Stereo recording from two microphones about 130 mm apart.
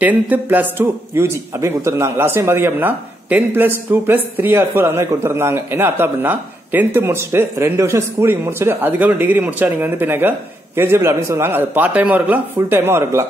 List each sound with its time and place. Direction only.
0.0 s speech: 15° right (ahead or behind)